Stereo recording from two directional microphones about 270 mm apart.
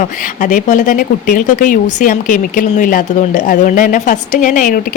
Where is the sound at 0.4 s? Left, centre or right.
Left.